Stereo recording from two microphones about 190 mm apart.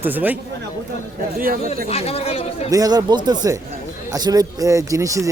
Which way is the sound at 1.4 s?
50° right (ahead or behind).